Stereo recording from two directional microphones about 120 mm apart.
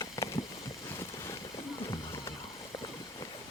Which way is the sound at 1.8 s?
35° left (ahead or behind).